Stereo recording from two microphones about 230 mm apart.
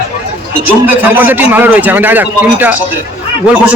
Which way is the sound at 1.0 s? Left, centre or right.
Centre.